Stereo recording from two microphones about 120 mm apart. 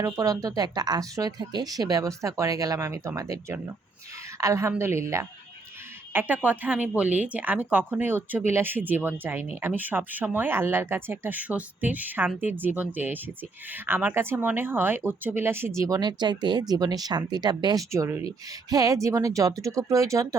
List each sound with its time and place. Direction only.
0.0 s a woman's voice: 30° right (ahead or behind)
6.1 s speech: 15° right (ahead or behind)